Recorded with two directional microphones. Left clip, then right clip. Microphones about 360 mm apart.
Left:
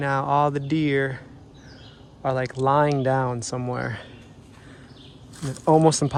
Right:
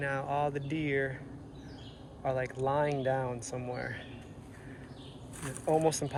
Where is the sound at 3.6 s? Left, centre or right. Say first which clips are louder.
Left 8 dB; left.